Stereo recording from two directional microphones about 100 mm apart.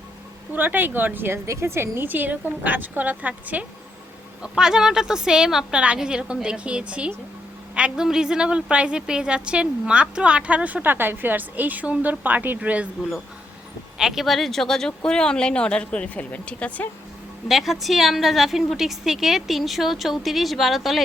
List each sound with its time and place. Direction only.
0.5 s a woman's voice: 20° right (ahead or behind)
14.0 s speech: centre (ahead or behind)
17.5 s a woman's voice: centre (ahead or behind)